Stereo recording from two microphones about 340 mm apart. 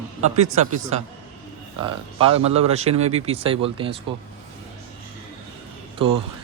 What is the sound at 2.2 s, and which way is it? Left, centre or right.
A man's voice, centre.